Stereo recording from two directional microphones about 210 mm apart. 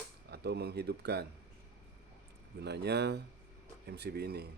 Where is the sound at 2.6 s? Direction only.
50° right (ahead or behind).